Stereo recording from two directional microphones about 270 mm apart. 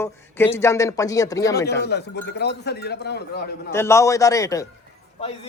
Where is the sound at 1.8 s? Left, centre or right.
Left.